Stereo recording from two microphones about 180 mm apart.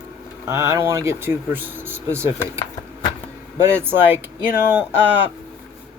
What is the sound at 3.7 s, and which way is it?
Speech, 15° right (ahead or behind).